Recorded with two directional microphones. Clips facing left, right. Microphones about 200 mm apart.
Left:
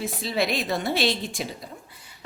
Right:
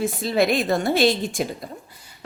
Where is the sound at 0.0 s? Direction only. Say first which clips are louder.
Right 6 dB; 50° right (ahead or behind).